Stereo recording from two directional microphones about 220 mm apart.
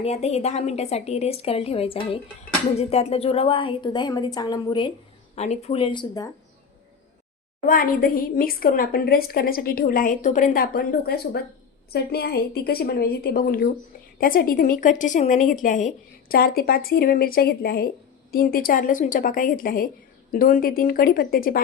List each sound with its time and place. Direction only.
0.0 s a woman's voice: 30° left (ahead or behind)
5.3 s a woman's voice: 30° left (ahead or behind)
7.7 s a woman's voice: 40° left (ahead or behind)